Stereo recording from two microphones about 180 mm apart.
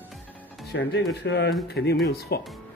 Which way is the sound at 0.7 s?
70° left (ahead or behind).